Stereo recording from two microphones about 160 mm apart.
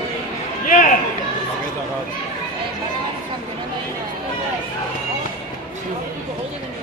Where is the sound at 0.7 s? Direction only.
55° left (ahead or behind).